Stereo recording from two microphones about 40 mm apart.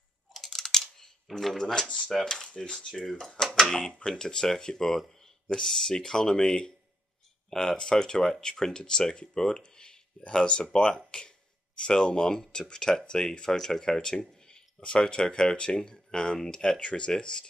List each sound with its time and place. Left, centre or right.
0.3 s computer keyboard: centre
0.7 s typing: centre
1.3 s speech: centre
2.9 s speech: centre
11.1 s a sound: centre
11.8 s speech: left